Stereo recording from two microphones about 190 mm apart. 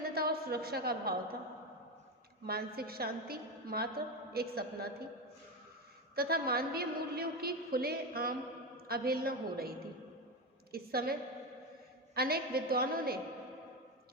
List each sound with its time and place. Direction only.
0.0 s a sound: 55° right (ahead or behind)
2.5 s a woman's voice: 55° right (ahead or behind)
6.1 s a woman's voice: 55° right (ahead or behind)